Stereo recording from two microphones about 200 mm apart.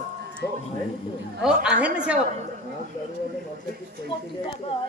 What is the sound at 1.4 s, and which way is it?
Speech, 5° right (ahead or behind).